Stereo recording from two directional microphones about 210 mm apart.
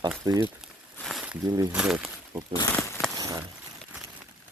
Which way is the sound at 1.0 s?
Centre (ahead or behind).